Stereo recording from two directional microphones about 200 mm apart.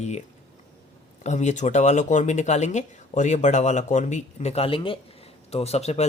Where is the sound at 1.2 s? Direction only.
35° left (ahead or behind).